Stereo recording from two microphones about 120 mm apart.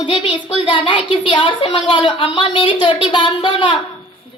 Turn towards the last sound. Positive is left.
turn(degrees=45)  # may be behind; listen again after turning